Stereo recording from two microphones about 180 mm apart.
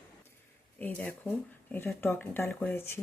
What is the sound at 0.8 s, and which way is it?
Speech, 10° left (ahead or behind).